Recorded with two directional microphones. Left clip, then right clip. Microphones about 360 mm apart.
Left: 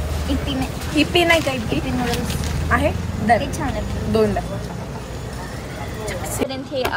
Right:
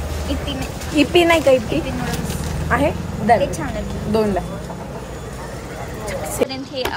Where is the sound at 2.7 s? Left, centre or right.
Centre.